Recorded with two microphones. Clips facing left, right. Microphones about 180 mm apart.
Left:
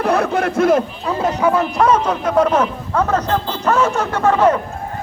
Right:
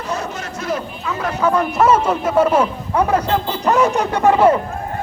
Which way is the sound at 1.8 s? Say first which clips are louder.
Right 1 dB; 5° right (ahead or behind).